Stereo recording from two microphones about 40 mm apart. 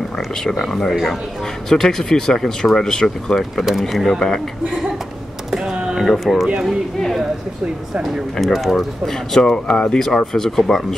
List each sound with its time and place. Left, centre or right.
0.4 s speech: centre
3.5 s speech: centre
5.5 s computer keyboard: centre
6.0 s speech: centre
8.0 s speech: centre
9.7 s speech: left
9.9 s speech: centre